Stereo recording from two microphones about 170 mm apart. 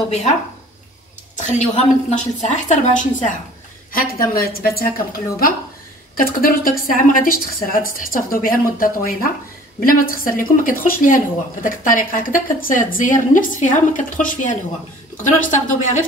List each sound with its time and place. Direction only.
0.1 s a woman's voice: 40° left (ahead or behind)
3.9 s a woman's voice: 60° left (ahead or behind)